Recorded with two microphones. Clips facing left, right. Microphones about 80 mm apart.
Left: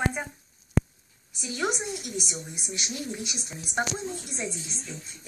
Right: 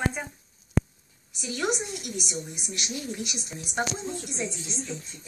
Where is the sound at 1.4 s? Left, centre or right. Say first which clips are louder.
Even; centre.